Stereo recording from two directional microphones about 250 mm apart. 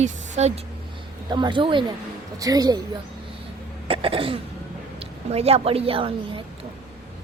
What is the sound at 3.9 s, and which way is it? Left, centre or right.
Cough, right.